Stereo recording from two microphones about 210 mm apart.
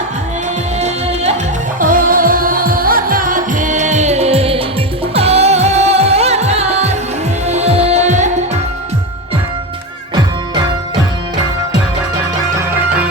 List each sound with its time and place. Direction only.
0.8 s music: 30° right (ahead or behind)
1.8 s music: 40° right (ahead or behind)